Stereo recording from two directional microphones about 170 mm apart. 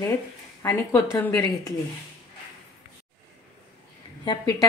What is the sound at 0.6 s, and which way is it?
Speech, 15° left (ahead or behind).